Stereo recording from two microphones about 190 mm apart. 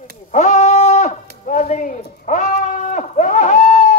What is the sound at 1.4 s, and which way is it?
Bleat, 40° left (ahead or behind).